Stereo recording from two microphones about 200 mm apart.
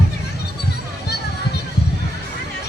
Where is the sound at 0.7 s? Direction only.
55° left (ahead or behind).